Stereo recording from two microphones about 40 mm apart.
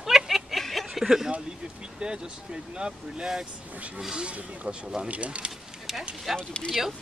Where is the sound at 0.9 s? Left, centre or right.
Centre.